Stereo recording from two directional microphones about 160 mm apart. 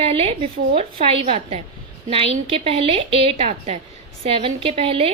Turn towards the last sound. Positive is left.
turn(degrees=-35)  # may be behind; listen again after turning